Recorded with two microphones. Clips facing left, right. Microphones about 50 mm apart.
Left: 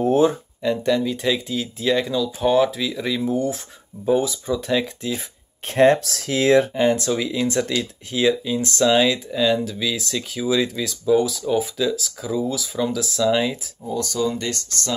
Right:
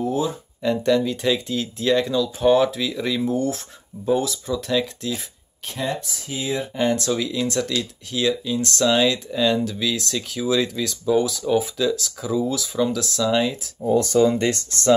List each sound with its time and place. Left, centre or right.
0.0 s speech: left
0.6 s speech: centre
5.7 s speech: left
6.0 s speech: left
6.7 s speech: centre
13.8 s speech: right